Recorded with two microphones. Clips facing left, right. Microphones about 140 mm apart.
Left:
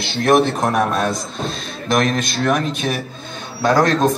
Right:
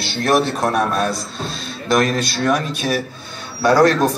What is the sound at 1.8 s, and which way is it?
Speech, 20° left (ahead or behind).